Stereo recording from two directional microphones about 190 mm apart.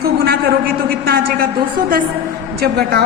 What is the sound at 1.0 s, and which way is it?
Speech, 55° right (ahead or behind).